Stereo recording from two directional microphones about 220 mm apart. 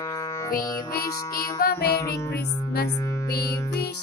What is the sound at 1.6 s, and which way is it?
Music, 45° left (ahead or behind).